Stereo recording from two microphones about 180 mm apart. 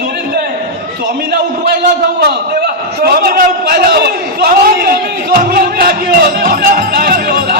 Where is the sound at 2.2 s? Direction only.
55° right (ahead or behind).